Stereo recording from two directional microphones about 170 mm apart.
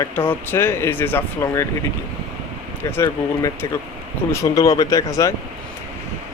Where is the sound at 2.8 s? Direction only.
15° left (ahead or behind).